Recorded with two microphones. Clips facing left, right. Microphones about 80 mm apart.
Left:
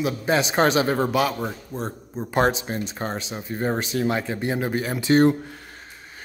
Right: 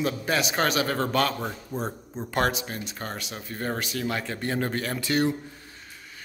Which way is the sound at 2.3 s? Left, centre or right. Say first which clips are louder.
Left 5 dB; left.